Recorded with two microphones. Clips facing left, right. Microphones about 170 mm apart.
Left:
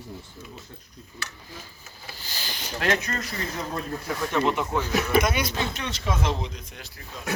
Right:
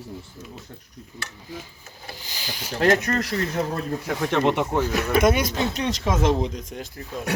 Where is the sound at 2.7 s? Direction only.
40° right (ahead or behind).